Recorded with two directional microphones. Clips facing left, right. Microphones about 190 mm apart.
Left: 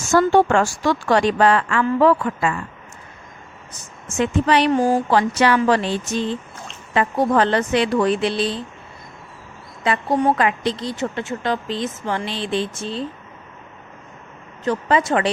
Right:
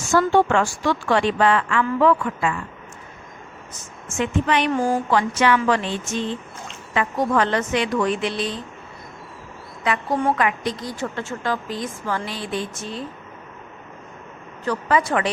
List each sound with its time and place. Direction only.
0.1 s a woman's voice: 40° left (ahead or behind)
3.7 s a woman's voice: 35° left (ahead or behind)
9.8 s a woman's voice: 30° left (ahead or behind)
14.6 s a woman's voice: 25° left (ahead or behind)